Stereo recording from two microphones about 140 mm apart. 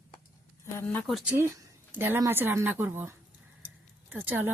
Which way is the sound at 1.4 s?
20° right (ahead or behind).